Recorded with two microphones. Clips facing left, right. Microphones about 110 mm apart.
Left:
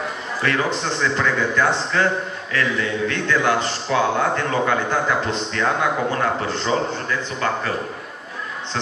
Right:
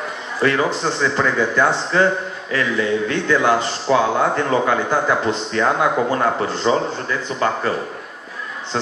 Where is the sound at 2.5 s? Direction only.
15° right (ahead or behind).